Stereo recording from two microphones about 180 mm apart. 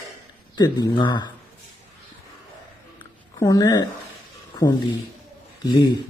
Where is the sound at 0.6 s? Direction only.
25° left (ahead or behind).